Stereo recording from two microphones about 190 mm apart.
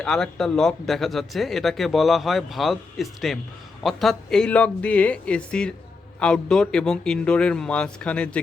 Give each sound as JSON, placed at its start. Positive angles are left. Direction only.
{"t": 0.0, "sound": "speech", "side_deg": 5}